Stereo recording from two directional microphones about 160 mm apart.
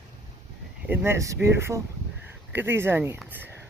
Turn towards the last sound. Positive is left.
turn(degrees=-10)  # may be behind; listen again after turning